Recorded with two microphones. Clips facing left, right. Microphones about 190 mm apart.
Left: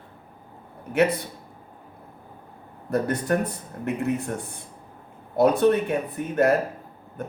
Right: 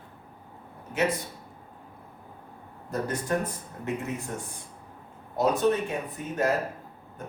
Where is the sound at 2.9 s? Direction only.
65° left (ahead or behind).